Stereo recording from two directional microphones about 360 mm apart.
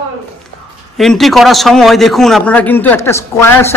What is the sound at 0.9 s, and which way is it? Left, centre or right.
A man's voice, centre.